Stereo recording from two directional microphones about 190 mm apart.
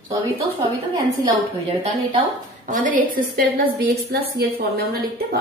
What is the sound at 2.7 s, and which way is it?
Speech, 45° right (ahead or behind).